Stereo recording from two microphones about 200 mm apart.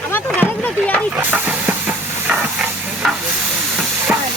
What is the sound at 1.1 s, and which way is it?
Steam, 10° right (ahead or behind).